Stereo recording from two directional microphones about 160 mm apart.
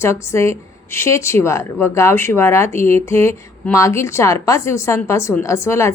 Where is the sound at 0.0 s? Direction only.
15° left (ahead or behind).